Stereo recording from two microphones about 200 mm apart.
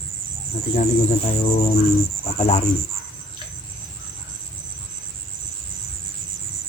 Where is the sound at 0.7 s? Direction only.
30° left (ahead or behind).